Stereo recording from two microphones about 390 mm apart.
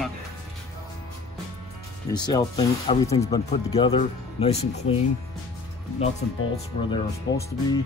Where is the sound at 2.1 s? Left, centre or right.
Centre.